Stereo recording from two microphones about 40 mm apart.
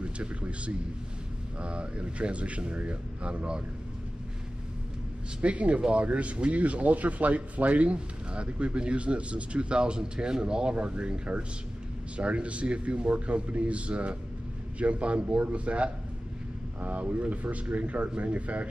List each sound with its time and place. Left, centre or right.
0.0 s speech: right
5.4 s speech: right